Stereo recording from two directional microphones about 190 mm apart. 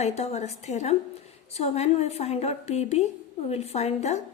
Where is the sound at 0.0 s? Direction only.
35° left (ahead or behind).